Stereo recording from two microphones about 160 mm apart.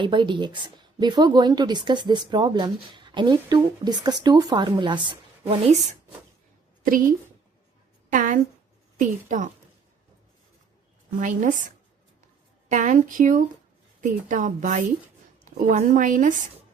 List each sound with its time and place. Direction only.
0.0 s speech: 30° right (ahead or behind)
6.8 s a woman's voice: 60° right (ahead or behind)
8.1 s a woman's voice: 55° right (ahead or behind)
11.2 s a woman's voice: 50° right (ahead or behind)
12.6 s a woman's voice: 50° right (ahead or behind)